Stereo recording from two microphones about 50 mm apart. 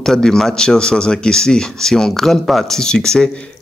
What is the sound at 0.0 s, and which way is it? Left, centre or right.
Speech, centre.